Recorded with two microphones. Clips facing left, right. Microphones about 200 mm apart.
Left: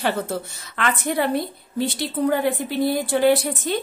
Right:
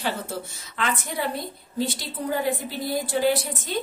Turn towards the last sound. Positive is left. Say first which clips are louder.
# left 5 dB
turn(degrees=60)  # may be behind; listen again after turning